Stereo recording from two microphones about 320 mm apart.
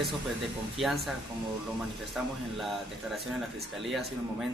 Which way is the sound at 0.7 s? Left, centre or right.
Centre.